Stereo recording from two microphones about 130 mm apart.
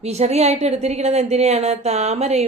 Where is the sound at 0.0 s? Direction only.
55° right (ahead or behind).